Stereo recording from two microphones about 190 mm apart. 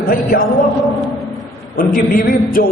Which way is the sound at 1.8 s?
50° left (ahead or behind).